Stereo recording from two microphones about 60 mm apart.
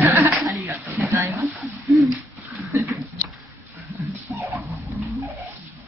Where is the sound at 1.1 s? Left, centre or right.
Right.